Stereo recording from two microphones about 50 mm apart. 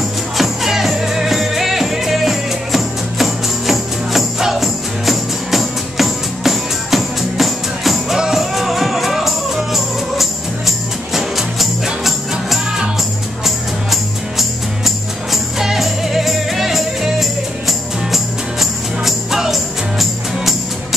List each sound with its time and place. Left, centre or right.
0.4 s music: centre